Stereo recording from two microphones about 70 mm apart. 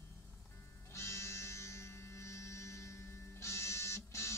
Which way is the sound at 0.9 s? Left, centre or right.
Left.